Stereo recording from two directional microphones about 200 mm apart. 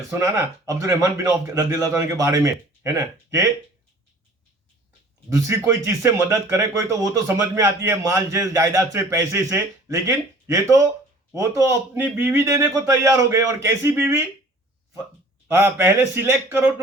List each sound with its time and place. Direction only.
0.1 s speech: 15° right (ahead or behind)
5.4 s speech: 15° right (ahead or behind)
15.5 s speech: 10° right (ahead or behind)